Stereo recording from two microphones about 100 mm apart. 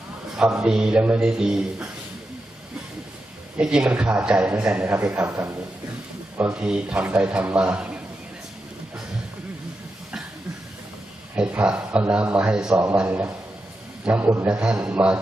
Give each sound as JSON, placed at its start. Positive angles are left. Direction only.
{"t": 0.3, "sound": "a man's voice", "side_deg": -5}
{"t": 3.6, "sound": "a man's voice", "side_deg": -10}
{"t": 5.2, "sound": "speech", "side_deg": -25}
{"t": 6.6, "sound": "a man's voice", "side_deg": -10}
{"t": 11.3, "sound": "a man's voice", "side_deg": -10}